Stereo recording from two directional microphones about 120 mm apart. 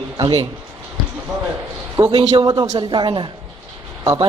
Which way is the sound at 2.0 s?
35° right (ahead or behind).